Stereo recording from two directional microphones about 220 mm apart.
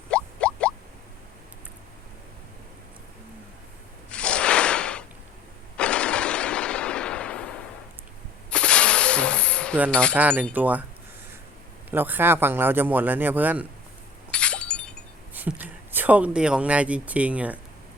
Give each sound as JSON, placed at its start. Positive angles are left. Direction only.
{"t": 0.1, "sound": "a sound", "side_deg": 5}
{"t": 4.1, "sound": "a sound", "side_deg": 5}
{"t": 5.7, "sound": "gunshot", "side_deg": 5}
{"t": 8.4, "sound": "a sound", "side_deg": 5}
{"t": 9.9, "sound": "wind chime", "side_deg": 5}
{"t": 10.2, "sound": "speech", "side_deg": -5}
{"t": 11.9, "sound": "speech", "side_deg": -10}
{"t": 14.3, "sound": "breaking", "side_deg": 5}
{"t": 15.4, "sound": "speech", "side_deg": -10}